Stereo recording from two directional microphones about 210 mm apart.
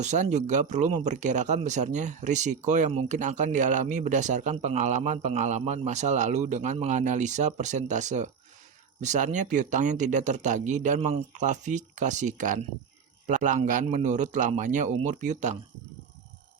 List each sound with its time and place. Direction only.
0.0 s speech: 35° right (ahead or behind)